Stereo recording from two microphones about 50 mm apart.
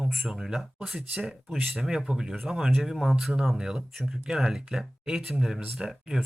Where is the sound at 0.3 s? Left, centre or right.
Centre.